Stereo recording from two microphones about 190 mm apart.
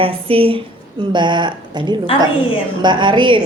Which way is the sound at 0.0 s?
30° right (ahead or behind).